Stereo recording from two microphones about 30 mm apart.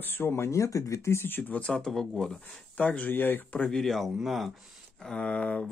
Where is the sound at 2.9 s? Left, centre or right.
Left.